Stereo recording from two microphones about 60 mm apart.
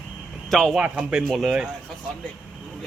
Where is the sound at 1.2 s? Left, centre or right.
Centre.